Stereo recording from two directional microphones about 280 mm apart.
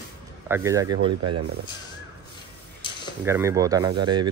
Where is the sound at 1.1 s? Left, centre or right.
Right.